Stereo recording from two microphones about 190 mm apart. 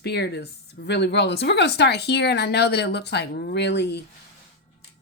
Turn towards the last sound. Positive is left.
turn(degrees=60)  # may be behind; listen again after turning